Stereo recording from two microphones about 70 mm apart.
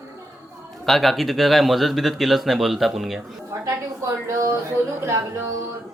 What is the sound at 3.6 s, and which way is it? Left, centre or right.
A woman's voice, right.